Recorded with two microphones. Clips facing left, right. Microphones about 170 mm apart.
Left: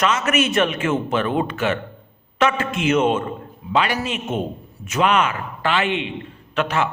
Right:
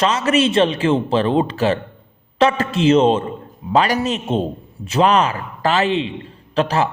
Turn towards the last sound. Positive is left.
turn(degrees=-35)  # may be behind; listen again after turning